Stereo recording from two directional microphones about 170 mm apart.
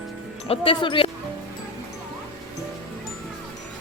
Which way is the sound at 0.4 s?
35° left (ahead or behind).